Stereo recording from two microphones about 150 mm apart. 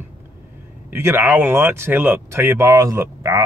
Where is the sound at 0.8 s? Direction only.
15° right (ahead or behind).